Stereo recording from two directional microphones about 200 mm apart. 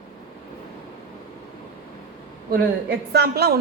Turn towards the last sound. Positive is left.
turn(degrees=-55)  # may be behind; listen again after turning